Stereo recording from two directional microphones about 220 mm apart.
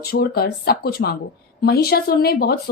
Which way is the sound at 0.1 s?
45° left (ahead or behind).